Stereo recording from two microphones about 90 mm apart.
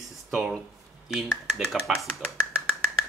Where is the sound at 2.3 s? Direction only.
10° right (ahead or behind).